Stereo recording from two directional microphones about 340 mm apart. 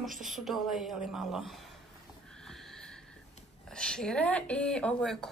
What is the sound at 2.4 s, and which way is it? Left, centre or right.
Sniff, centre.